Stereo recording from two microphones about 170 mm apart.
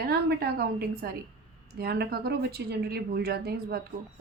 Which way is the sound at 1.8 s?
70° right (ahead or behind).